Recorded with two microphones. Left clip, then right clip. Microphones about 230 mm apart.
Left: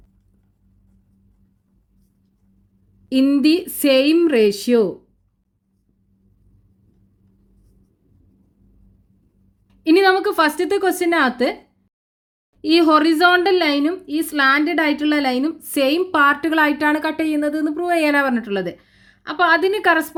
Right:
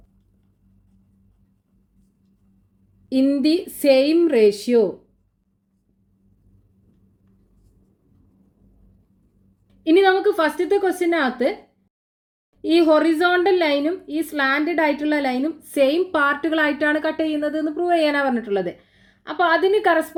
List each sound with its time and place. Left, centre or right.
3.2 s a woman's voice: left
9.9 s a woman's voice: left
12.8 s a woman's voice: left